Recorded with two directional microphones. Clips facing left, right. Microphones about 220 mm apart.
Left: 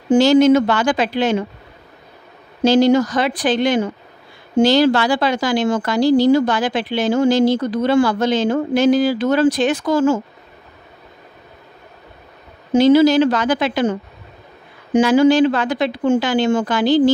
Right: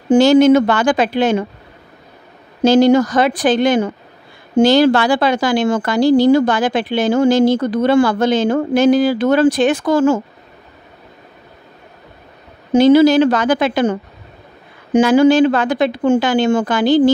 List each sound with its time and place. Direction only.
0.1 s a woman's voice: 55° right (ahead or behind)
2.6 s a woman's voice: 50° right (ahead or behind)
12.7 s a woman's voice: 55° right (ahead or behind)
15.0 s a woman's voice: 50° right (ahead or behind)